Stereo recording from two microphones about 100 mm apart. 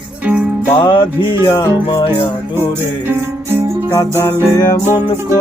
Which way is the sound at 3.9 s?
30° left (ahead or behind).